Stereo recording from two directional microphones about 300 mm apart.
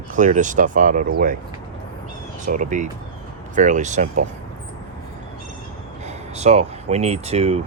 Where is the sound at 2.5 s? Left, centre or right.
Right.